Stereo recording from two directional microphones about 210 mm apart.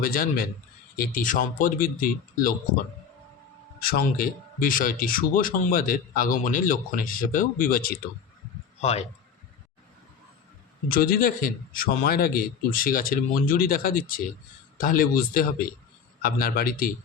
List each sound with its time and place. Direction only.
0.0 s a man's voice: 45° left (ahead or behind)
3.8 s speech: 45° left (ahead or behind)
8.8 s speech: 30° left (ahead or behind)
10.8 s a man's voice: 45° left (ahead or behind)